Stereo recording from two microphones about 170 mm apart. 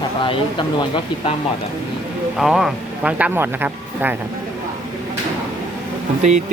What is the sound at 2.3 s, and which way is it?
Speech, centre (ahead or behind).